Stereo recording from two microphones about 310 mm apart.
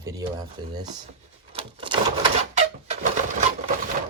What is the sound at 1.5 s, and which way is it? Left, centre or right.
Typewriter, centre.